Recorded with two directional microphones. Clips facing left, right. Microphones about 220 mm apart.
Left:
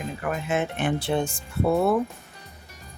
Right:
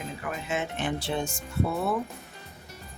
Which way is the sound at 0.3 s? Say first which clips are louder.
Left 6 dB; 55° left (ahead or behind).